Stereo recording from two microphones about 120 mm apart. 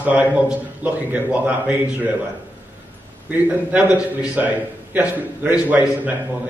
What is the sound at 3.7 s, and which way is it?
A man's voice, 10° right (ahead or behind).